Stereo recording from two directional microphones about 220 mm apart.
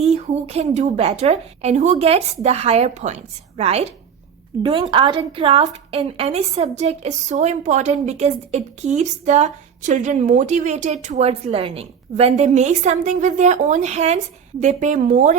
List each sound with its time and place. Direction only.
0.0 s a woman's voice: 30° right (ahead or behind)